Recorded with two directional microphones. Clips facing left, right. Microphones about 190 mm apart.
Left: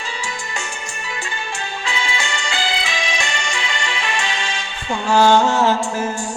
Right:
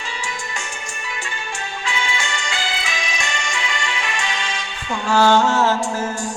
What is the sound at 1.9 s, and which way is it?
Music, 35° left (ahead or behind).